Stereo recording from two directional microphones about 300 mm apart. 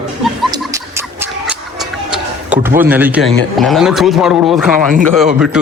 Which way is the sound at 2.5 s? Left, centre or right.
Centre.